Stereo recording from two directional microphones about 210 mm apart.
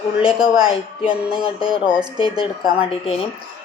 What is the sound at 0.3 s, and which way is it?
Speech, 20° right (ahead or behind).